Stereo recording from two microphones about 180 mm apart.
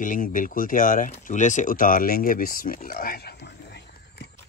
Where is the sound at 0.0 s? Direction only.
50° left (ahead or behind); by 3.8 s 70° left (ahead or behind).